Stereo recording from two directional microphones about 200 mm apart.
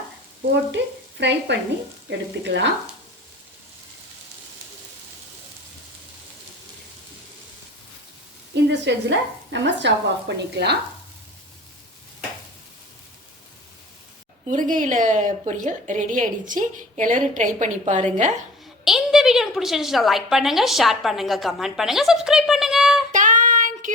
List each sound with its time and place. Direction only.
0.8 s speech: 60° right (ahead or behind)
8.7 s speech: 60° right (ahead or behind)
14.4 s a woman's voice: 40° right (ahead or behind)
18.9 s a woman's voice: centre (ahead or behind)
23.1 s child singing: 40° right (ahead or behind)